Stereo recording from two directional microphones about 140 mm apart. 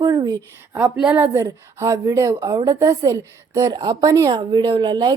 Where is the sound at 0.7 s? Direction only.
15° right (ahead or behind).